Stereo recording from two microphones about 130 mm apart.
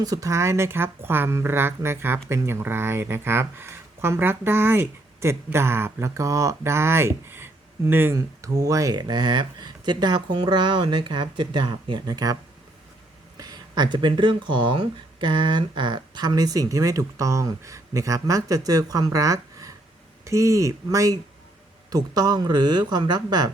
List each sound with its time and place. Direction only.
0.0 s speech: 25° right (ahead or behind)